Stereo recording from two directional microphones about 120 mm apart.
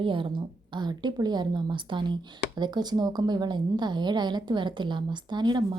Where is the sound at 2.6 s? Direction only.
35° right (ahead or behind).